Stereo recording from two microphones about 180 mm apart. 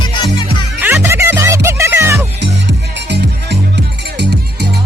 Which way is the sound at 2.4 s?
70° right (ahead or behind).